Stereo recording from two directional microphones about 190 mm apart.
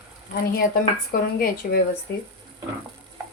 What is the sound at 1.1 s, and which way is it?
Speech, 50° left (ahead or behind).